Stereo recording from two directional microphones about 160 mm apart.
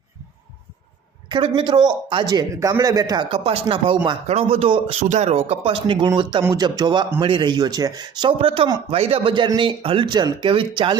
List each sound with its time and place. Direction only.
1.3 s a man's voice: 30° right (ahead or behind)
6.4 s a man's voice: 20° right (ahead or behind)